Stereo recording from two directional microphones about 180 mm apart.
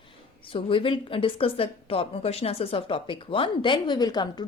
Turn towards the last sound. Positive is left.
turn(degrees=25)  # may be behind; listen again after turning